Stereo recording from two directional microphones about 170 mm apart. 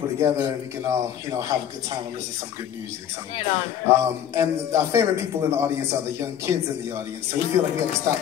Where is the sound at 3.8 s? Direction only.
15° right (ahead or behind).